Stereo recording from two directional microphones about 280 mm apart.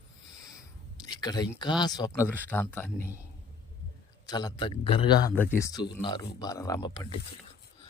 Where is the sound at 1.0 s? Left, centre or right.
Centre.